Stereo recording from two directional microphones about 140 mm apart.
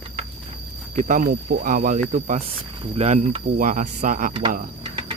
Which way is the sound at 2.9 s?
50° right (ahead or behind).